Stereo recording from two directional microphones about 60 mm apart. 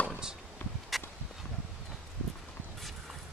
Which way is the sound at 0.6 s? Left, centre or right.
Left.